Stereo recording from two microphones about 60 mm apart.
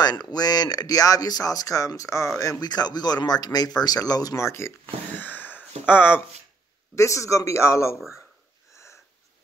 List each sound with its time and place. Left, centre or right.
0.0 s speech: left
2.9 s speech: left
4.4 s speech: left
5.2 s a sound: left
7.0 s speech: left